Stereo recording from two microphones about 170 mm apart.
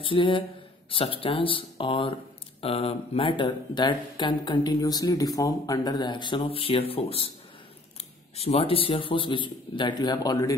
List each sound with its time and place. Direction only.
0.0 s speech: 30° left (ahead or behind)